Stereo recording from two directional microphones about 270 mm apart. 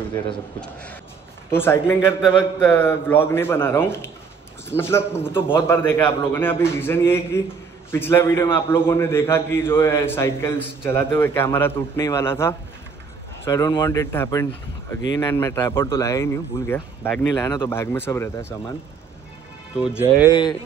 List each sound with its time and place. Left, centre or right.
1.5 s speech: centre